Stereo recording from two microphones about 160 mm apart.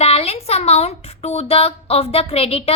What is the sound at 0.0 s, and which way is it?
Speech, 40° left (ahead or behind).